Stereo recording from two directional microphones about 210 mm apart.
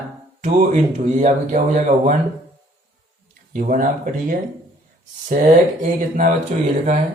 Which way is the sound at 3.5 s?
40° right (ahead or behind).